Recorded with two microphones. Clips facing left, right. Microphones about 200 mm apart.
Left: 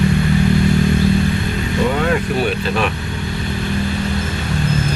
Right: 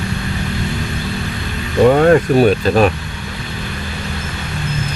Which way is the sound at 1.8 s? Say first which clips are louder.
Right 9 dB; 45° right (ahead or behind).